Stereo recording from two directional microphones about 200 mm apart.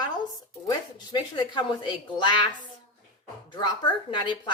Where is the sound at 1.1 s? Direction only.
20° left (ahead or behind).